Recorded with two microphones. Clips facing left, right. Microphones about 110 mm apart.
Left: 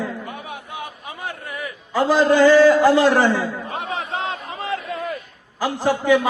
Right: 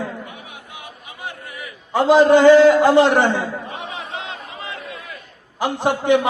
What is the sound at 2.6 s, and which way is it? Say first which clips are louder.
Speech: right 1 dB; 60° right (ahead or behind).